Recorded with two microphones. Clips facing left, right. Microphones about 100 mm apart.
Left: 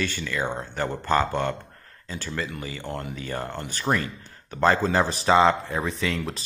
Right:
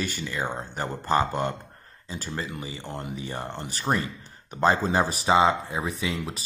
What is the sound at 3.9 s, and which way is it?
Speech, centre (ahead or behind).